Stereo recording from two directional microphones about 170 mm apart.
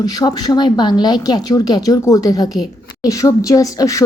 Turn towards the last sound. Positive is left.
turn(degrees=20)  # may be behind; listen again after turning